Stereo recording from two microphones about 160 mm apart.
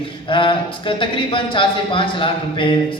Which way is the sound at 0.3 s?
30° left (ahead or behind).